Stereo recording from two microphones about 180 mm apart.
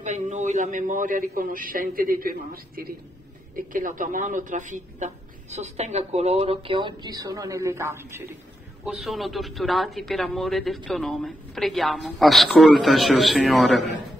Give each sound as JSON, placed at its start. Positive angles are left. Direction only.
{"t": 0.0, "sound": "a man's voice", "side_deg": -40}
{"t": 8.8, "sound": "speech", "side_deg": 0}